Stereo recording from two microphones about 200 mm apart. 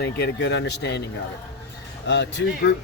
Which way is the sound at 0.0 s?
60° left (ahead or behind).